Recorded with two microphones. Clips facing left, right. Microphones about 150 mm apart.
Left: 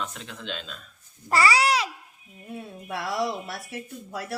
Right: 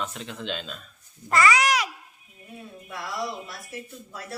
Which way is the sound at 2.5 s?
75° left (ahead or behind).